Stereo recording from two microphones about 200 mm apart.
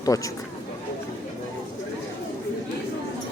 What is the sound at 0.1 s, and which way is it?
Speech, 15° left (ahead or behind).